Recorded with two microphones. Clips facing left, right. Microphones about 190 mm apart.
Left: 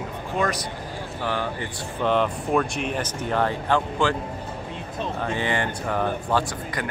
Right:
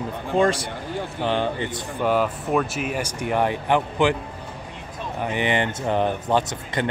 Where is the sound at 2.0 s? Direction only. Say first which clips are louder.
Right 1 dB; 5° right (ahead or behind).